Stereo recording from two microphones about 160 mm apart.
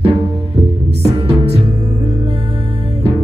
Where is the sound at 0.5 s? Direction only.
40° right (ahead or behind).